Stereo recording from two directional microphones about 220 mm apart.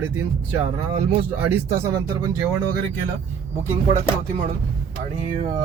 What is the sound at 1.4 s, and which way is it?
Speech, 10° right (ahead or behind).